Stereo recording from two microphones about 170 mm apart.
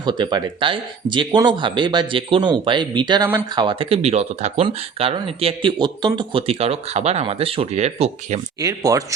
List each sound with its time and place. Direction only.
0.0 s speech: 25° right (ahead or behind)
8.6 s speech: 20° right (ahead or behind)